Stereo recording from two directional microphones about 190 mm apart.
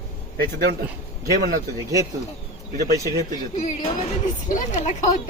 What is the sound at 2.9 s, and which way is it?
Speech, 15° right (ahead or behind).